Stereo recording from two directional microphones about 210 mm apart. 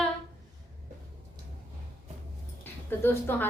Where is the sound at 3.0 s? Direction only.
10° left (ahead or behind).